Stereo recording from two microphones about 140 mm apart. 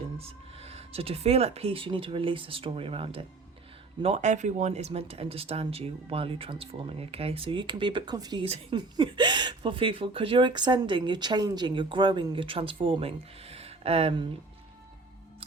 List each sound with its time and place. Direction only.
0.2 s speech: 45° right (ahead or behind)
4.0 s speech: 55° right (ahead or behind)